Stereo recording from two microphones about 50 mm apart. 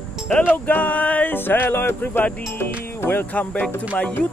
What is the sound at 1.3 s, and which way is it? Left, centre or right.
Music, left.